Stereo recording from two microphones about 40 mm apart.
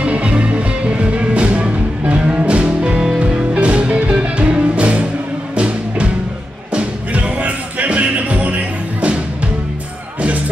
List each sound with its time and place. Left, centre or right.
0.0 s music: right